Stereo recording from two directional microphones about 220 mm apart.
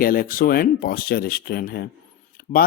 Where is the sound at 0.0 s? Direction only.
40° left (ahead or behind).